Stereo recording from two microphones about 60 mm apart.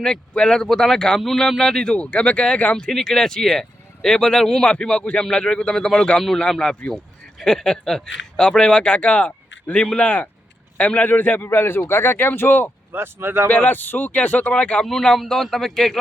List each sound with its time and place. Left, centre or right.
0.0 s speech: centre; by 11.4 s left
11.4 s speech: left
12.9 s speech: right
13.5 s speech: left
14.8 s speech: centre